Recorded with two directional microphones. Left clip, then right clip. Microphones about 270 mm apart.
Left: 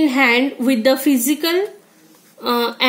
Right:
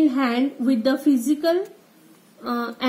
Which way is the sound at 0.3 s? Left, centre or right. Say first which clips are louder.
Left 7 dB; centre.